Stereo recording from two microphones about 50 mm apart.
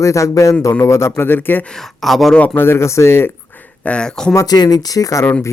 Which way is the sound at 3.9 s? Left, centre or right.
Centre.